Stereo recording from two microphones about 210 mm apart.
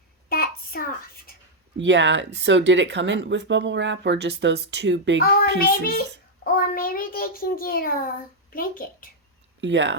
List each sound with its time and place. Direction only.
0.3 s a sound: 45° left (ahead or behind)
1.8 s speech: 60° right (ahead or behind)
5.2 s a child's voice: 45° left (ahead or behind)
9.6 s speech: 60° right (ahead or behind)